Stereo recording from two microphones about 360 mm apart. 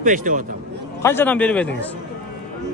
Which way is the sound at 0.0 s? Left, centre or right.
Right.